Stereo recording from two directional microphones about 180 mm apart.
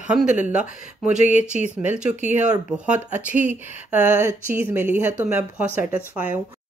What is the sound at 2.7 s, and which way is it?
Speech, 5° right (ahead or behind).